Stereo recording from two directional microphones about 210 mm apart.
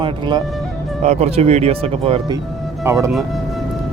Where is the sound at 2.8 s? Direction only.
15° right (ahead or behind).